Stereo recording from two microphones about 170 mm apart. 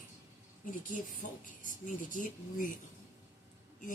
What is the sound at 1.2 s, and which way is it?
Speech, 50° left (ahead or behind).